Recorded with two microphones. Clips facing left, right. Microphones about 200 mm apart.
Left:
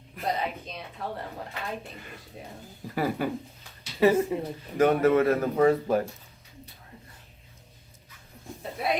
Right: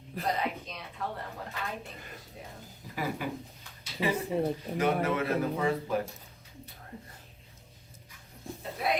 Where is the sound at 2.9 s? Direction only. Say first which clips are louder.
Left 6 dB; 45° left (ahead or behind).